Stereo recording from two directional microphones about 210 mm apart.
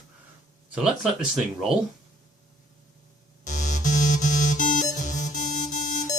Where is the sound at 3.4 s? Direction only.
35° left (ahead or behind).